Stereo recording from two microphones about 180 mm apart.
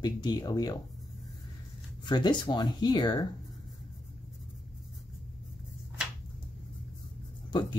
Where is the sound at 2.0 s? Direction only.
25° left (ahead or behind).